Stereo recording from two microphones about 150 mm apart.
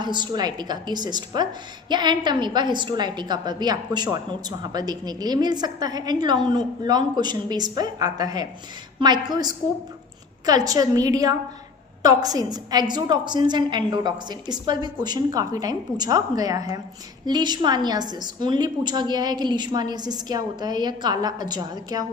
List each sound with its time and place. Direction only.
0.0 s a woman's voice: 30° right (ahead or behind)